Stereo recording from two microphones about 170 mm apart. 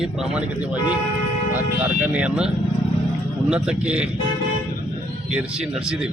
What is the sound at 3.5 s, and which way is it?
Speech, 5° right (ahead or behind).